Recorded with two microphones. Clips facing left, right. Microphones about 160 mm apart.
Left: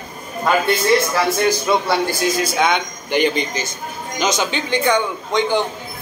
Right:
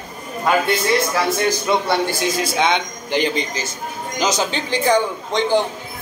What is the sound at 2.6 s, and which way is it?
A man's voice, 25° right (ahead or behind).